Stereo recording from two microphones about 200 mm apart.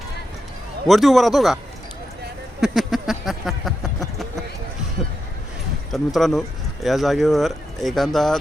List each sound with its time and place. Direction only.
0.9 s speech: centre (ahead or behind)
2.6 s a sound: centre (ahead or behind)
5.9 s speech: centre (ahead or behind)